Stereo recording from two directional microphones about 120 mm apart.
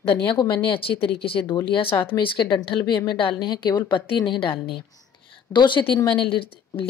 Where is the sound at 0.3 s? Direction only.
45° left (ahead or behind).